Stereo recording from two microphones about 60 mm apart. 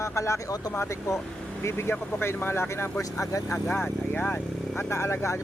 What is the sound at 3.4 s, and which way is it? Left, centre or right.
Speech, left.